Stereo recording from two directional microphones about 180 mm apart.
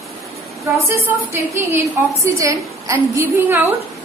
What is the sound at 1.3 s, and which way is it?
A woman's voice, 15° right (ahead or behind).